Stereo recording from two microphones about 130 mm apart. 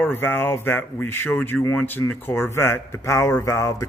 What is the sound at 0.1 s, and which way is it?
A man's voice, 15° left (ahead or behind).